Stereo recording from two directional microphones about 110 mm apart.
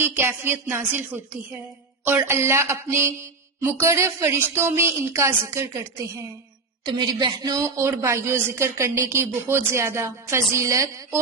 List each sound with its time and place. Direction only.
0.0 s speech: 20° right (ahead or behind)
6.8 s a woman's voice: 45° right (ahead or behind)
7.5 s speech: 25° right (ahead or behind)